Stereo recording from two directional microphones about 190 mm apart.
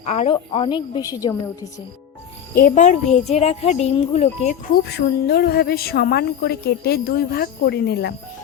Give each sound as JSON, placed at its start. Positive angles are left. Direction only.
{"t": 0.0, "sound": "a woman's voice", "side_deg": 35}
{"t": 2.6, "sound": "speech", "side_deg": 40}
{"t": 4.7, "sound": "speech", "side_deg": 60}